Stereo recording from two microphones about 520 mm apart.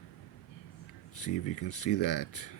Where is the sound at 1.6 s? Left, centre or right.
Left.